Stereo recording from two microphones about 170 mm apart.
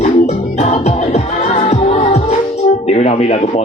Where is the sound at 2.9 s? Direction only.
40° left (ahead or behind).